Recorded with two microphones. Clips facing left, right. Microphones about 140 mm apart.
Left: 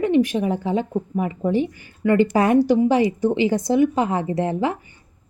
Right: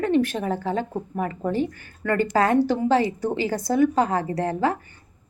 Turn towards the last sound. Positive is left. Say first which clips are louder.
# left 2 dB
turn(degrees=20)  # may be behind; listen again after turning